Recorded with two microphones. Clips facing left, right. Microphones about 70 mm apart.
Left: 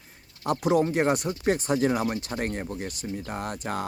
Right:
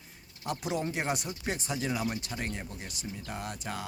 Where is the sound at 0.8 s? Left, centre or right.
Left.